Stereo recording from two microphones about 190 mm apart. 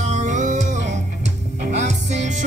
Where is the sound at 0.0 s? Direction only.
40° right (ahead or behind).